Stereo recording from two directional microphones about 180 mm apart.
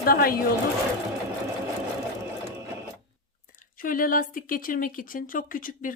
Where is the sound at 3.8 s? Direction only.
50° left (ahead or behind).